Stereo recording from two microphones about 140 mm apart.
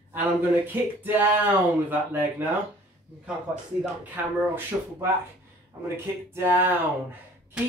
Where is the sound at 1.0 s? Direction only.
15° right (ahead or behind).